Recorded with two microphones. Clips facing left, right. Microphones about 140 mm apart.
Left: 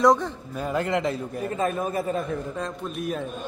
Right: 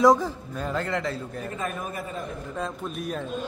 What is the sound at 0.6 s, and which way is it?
Speech, 10° left (ahead or behind).